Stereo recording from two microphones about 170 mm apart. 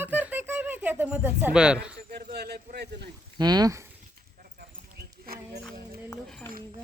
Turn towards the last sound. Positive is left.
turn(degrees=5)  # may be behind; listen again after turning